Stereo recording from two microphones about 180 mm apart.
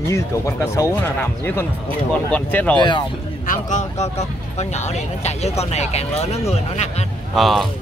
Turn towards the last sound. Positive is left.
turn(degrees=0)  # may be behind; listen again after turning